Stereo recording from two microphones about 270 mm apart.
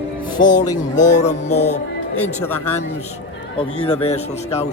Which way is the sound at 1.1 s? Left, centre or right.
Left.